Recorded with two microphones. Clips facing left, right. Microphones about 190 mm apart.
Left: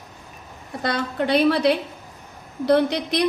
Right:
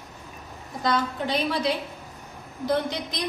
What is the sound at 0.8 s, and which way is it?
A woman's voice, 65° left (ahead or behind).